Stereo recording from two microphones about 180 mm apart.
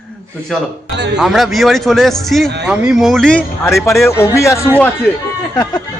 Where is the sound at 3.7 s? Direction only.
15° left (ahead or behind).